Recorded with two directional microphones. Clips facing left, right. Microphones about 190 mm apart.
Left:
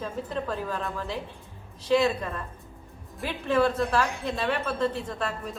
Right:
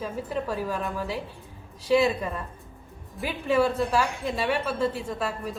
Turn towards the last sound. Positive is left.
turn(degrees=-10)  # may be behind; listen again after turning